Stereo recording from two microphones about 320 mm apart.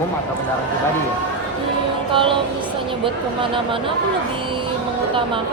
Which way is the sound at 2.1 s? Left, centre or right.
Centre.